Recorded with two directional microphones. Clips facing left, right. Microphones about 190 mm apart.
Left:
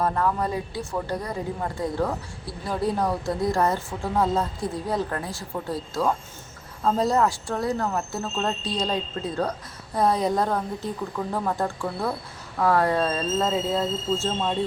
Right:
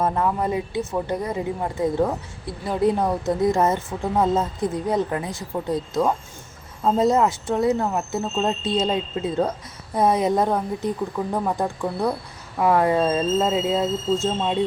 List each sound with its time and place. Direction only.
0.0 s a woman's voice: 15° right (ahead or behind)